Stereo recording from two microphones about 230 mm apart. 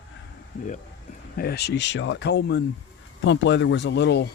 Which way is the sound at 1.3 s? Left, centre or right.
Left.